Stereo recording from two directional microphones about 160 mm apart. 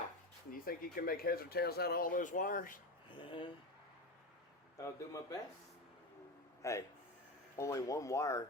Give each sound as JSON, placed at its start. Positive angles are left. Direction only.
{"t": 0.5, "sound": "speech", "side_deg": 65}
{"t": 3.1, "sound": "speech", "side_deg": 30}
{"t": 4.8, "sound": "speech", "side_deg": 20}
{"t": 6.6, "sound": "speech", "side_deg": 20}